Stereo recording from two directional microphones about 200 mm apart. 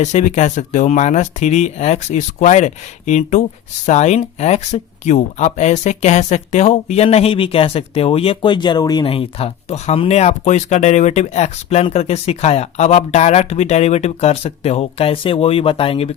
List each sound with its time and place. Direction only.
0.0 s speech: 35° left (ahead or behind)